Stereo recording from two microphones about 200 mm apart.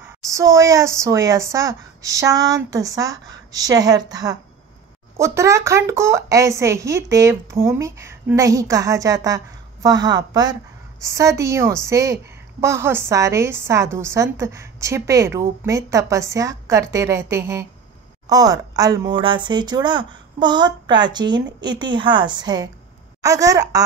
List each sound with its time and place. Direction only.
0.3 s speech: 15° right (ahead or behind)